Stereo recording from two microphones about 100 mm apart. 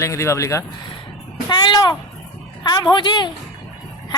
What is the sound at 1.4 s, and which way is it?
A woman's voice, 45° left (ahead or behind).